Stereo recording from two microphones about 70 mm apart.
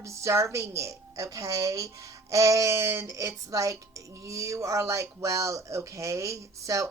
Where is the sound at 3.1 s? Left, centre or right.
Right.